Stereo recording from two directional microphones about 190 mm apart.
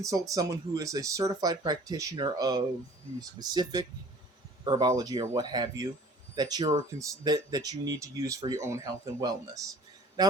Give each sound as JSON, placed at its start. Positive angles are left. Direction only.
{"t": 0.0, "sound": "speech", "side_deg": -20}